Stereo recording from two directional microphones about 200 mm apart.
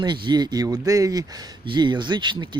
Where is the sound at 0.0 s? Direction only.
20° right (ahead or behind).